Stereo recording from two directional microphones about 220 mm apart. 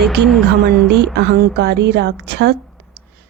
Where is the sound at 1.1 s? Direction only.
50° right (ahead or behind).